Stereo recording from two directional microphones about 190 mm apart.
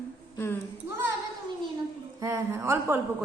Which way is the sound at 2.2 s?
15° right (ahead or behind).